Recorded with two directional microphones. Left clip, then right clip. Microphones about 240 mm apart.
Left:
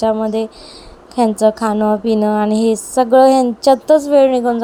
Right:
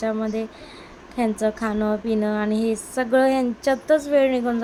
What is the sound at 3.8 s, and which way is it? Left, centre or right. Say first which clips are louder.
Speech: left 5 dB; centre.